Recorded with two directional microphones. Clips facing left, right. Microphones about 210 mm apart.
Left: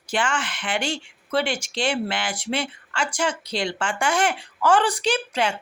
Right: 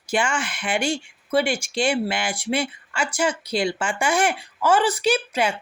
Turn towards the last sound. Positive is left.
turn(degrees=-10)  # may be behind; listen again after turning